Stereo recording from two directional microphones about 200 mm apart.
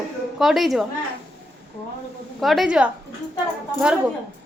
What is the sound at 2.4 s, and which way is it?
A woman's voice, centre (ahead or behind).